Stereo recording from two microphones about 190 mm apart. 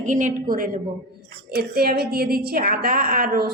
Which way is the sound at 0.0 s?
40° right (ahead or behind).